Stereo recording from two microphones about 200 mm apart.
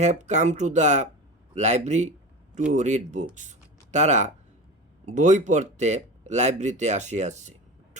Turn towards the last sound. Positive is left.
turn(degrees=-35)  # may be behind; listen again after turning